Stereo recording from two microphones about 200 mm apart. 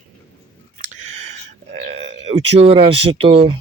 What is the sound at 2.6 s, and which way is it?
Speech, 30° right (ahead or behind).